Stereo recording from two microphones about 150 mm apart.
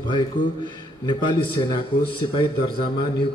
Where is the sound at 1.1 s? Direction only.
30° left (ahead or behind).